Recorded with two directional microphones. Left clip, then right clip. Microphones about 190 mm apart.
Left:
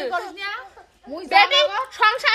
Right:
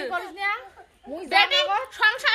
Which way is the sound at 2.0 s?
55° left (ahead or behind).